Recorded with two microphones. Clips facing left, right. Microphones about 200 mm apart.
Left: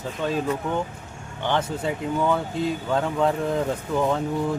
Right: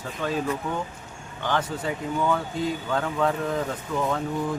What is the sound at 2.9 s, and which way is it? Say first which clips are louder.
Speech: left 3 dB; 25° left (ahead or behind).